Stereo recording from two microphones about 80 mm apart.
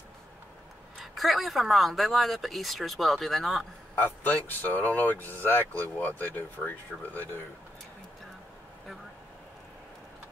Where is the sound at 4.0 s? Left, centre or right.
Left.